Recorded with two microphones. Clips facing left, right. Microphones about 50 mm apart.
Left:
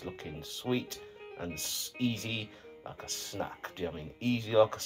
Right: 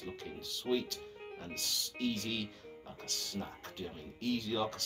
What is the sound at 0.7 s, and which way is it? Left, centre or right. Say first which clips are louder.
Speech: left 1 dB; left.